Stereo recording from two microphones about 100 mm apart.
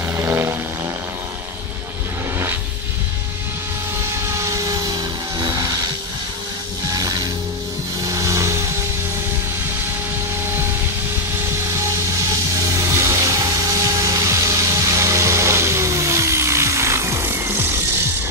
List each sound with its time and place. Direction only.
0.1 s music: 25° right (ahead or behind)
4.0 s vehicle: 30° right (ahead or behind)
7.0 s music: 40° right (ahead or behind)
8.0 s rub: 30° right (ahead or behind)
11.7 s music: 30° right (ahead or behind)